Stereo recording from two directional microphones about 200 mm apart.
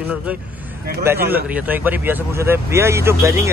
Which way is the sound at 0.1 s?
5° right (ahead or behind).